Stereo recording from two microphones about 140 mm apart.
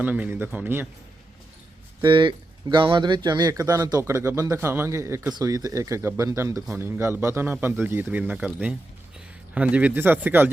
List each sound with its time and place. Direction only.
0.0 s a man's voice: 10° right (ahead or behind)
2.0 s a man's voice: 35° right (ahead or behind); by 10.5 s 15° right (ahead or behind)